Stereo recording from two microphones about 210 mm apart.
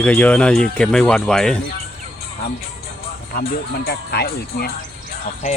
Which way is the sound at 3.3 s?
45° left (ahead or behind).